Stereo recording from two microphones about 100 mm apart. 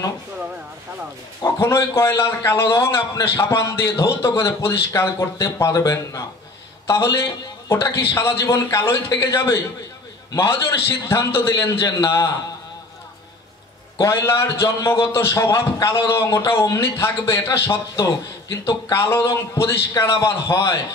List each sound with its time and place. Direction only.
1.4 s a man's voice: 30° left (ahead or behind)
13.9 s a man's voice: 30° left (ahead or behind)